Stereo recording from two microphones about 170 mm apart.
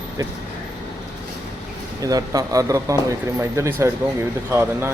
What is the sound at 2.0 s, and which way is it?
A man's voice, 20° right (ahead or behind).